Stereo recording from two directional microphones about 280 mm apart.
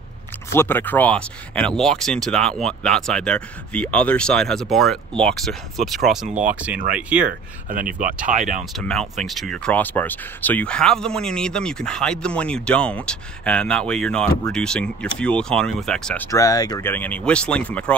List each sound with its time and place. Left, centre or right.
0.5 s speech: centre
7.7 s speech: right
8.7 s speech: centre